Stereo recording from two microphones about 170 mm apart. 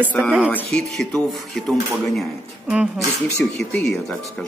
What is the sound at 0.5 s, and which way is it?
Speech, 5° left (ahead or behind).